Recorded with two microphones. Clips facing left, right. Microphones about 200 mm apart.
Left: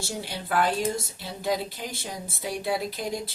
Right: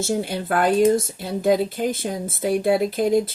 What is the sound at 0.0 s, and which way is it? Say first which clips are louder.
Speech: right 10 dB; 50° right (ahead or behind).